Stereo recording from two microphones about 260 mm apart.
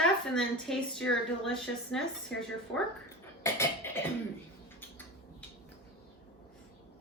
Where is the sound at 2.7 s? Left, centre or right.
Centre.